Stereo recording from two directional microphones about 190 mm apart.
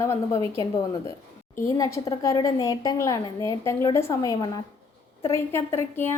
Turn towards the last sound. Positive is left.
turn(degrees=10)  # may be behind; listen again after turning